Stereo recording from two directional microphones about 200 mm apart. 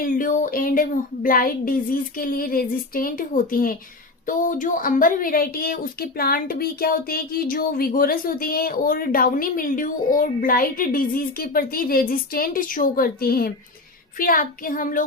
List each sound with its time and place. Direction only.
0.0 s a woman's voice: 45° left (ahead or behind)